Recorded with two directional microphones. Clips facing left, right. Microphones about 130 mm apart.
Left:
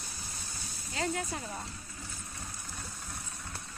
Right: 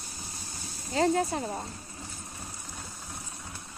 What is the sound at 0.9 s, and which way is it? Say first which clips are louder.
Speech: right 9 dB; 35° right (ahead or behind).